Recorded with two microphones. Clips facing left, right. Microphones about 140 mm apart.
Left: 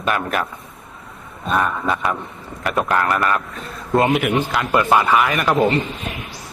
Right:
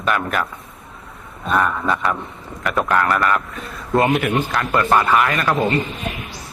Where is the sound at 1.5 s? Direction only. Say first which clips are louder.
Right 1 dB; 20° left (ahead or behind).